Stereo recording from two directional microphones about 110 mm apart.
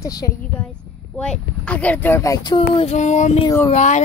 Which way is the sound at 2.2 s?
35° left (ahead or behind).